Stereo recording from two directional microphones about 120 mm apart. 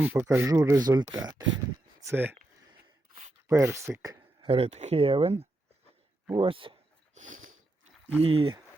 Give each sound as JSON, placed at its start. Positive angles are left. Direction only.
{"t": 0.0, "sound": "speech", "side_deg": -15}
{"t": 2.0, "sound": "speech", "side_deg": -20}
{"t": 3.5, "sound": "speech", "side_deg": -25}
{"t": 4.4, "sound": "speech", "side_deg": -55}
{"t": 7.1, "sound": "a sound", "side_deg": -90}
{"t": 8.2, "sound": "speech", "side_deg": -50}